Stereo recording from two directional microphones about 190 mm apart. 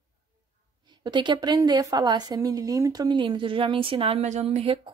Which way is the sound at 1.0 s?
25° right (ahead or behind).